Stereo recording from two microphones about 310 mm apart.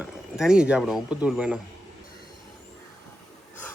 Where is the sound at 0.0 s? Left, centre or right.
Centre.